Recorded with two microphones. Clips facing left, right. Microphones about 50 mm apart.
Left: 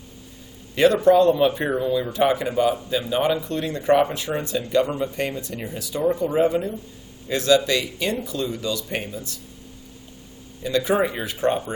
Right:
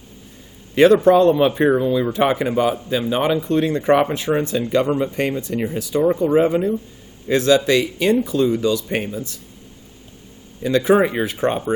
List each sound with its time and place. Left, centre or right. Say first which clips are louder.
0.8 s speech: right 4 dB; right
10.6 s speech: right 5 dB; right